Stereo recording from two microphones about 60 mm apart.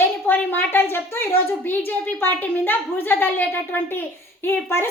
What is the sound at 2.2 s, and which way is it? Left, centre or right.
A woman's voice, left.